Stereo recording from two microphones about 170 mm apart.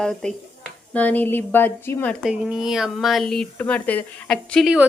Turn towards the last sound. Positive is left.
turn(degrees=0)  # may be behind; listen again after turning